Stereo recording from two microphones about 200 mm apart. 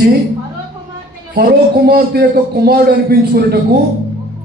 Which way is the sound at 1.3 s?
45° right (ahead or behind).